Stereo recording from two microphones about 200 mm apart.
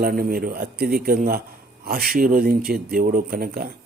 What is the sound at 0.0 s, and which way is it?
Speech, 45° right (ahead or behind).